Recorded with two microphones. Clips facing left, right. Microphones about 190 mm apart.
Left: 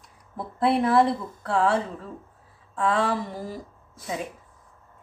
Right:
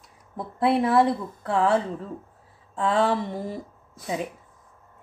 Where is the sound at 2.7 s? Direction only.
25° right (ahead or behind).